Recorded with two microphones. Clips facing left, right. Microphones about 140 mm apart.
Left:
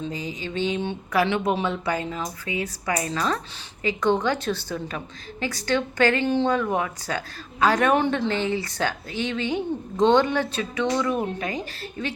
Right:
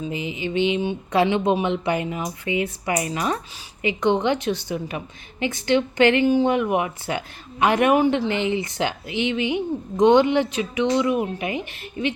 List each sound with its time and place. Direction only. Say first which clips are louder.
0.0 s a woman's voice: right 3 dB; 15° right (ahead or behind)